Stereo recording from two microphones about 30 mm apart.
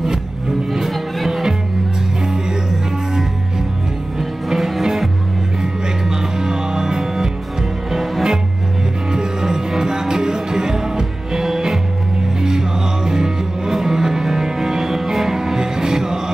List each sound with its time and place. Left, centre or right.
0.8 s music: centre
4.2 s music: centre
5.6 s music: centre
9.1 s music: right